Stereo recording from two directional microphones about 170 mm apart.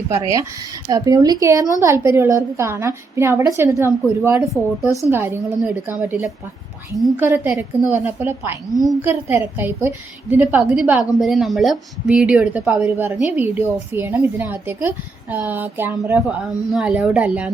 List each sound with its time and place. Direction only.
0.9 s a woman's voice: 20° right (ahead or behind)
4.4 s speech: centre (ahead or behind)
4.9 s a woman's voice: 20° left (ahead or behind)
5.1 s a woman's voice: 15° right (ahead or behind)